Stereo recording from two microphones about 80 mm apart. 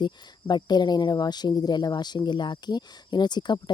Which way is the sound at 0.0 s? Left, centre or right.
Left.